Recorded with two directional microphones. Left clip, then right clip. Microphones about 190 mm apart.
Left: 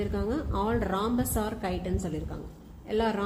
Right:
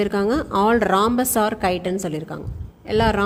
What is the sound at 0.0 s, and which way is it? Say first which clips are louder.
A woman's voice: right 11 dB; 55° right (ahead or behind).